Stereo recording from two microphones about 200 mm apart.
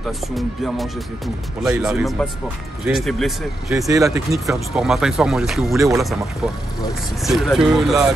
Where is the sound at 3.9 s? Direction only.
15° right (ahead or behind).